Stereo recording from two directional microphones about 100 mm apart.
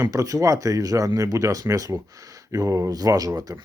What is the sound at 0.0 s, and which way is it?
Speech, 35° right (ahead or behind).